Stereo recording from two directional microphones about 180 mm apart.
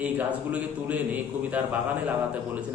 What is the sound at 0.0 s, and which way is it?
A man's voice, 5° right (ahead or behind).